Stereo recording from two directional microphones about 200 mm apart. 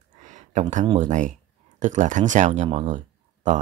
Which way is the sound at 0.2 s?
35° right (ahead or behind).